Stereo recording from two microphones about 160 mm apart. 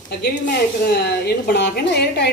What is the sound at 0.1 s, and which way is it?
A woman's voice, 80° left.